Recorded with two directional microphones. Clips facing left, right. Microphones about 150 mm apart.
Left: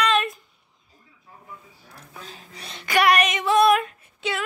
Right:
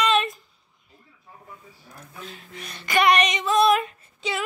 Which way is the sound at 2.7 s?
10° left (ahead or behind).